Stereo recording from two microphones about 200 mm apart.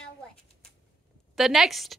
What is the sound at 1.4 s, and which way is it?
Speech, centre (ahead or behind).